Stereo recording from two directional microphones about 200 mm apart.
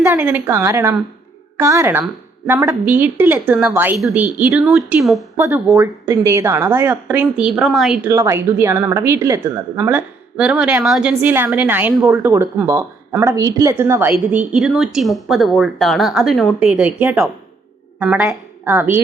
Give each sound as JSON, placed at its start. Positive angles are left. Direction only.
{"t": 0.1, "sound": "a woman's voice", "side_deg": -10}
{"t": 8.1, "sound": "a woman's voice", "side_deg": -15}
{"t": 12.1, "sound": "a woman's voice", "side_deg": -15}
{"t": 14.5, "sound": "a woman's voice", "side_deg": 0}